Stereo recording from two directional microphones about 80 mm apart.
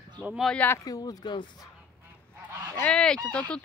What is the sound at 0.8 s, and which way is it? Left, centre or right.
Speech, left.